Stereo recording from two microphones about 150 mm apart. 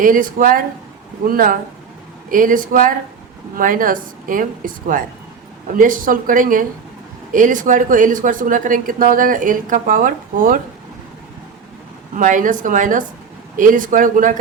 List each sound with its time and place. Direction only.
0.0 s speech: 65° right (ahead or behind)
12.1 s speech: 60° right (ahead or behind)